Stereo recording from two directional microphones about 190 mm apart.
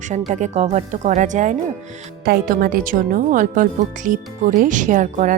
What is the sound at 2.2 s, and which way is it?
Speech, 55° right (ahead or behind).